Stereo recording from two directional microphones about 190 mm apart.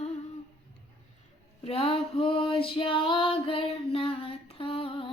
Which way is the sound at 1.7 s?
30° left (ahead or behind).